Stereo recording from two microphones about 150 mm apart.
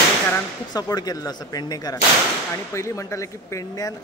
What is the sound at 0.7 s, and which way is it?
Speech, 25° left (ahead or behind).